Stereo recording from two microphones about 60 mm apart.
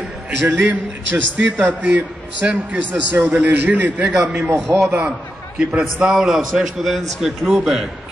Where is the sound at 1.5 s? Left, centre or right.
Right.